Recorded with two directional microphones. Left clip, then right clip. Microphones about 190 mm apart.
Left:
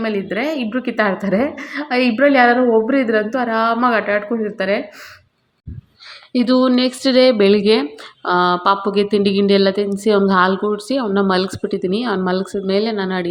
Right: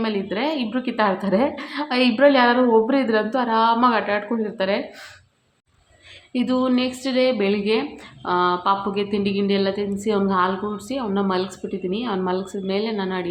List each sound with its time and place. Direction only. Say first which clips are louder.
0.0 s a woman's voice: left 3 dB; 10° left (ahead or behind)
6.3 s speech: left 6 dB; 30° left (ahead or behind)